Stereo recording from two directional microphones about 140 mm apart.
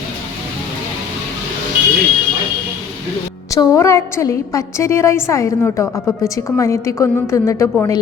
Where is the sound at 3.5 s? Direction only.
25° left (ahead or behind).